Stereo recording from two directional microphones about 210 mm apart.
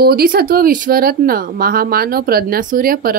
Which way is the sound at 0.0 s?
45° right (ahead or behind).